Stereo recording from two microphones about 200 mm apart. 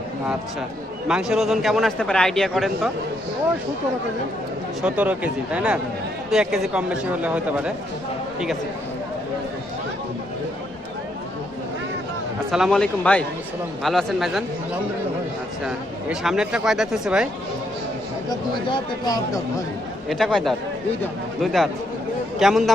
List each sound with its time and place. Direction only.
1.0 s a man's voice: 5° right (ahead or behind)
4.8 s a man's voice: 5° right (ahead or behind)
12.5 s a man's voice: centre (ahead or behind)
15.6 s a man's voice: 5° right (ahead or behind)
18.3 s speech: 20° left (ahead or behind)
20.1 s a man's voice: centre (ahead or behind)